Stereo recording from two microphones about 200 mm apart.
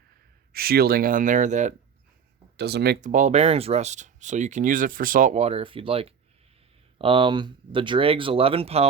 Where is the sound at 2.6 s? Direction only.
55° right (ahead or behind).